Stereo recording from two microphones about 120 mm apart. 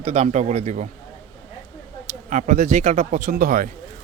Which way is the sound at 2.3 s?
90° right.